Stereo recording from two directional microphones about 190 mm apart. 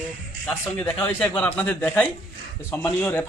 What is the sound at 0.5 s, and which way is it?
A man's voice, 5° left (ahead or behind).